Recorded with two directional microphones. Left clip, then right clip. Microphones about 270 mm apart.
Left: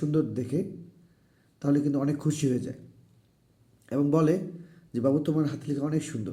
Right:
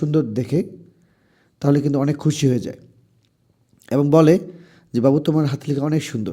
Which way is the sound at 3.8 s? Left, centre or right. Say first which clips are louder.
Right 10 dB; right.